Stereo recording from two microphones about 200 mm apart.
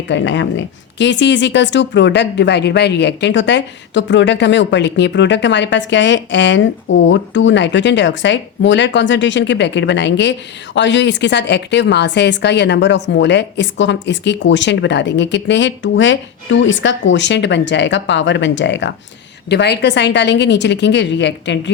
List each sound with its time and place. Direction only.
0.1 s speech: 65° left (ahead or behind)